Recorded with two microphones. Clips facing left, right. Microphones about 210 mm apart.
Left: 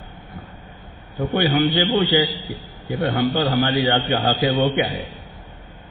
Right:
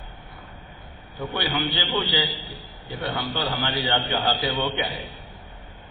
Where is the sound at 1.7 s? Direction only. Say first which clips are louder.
Left 8 dB; 10° left (ahead or behind).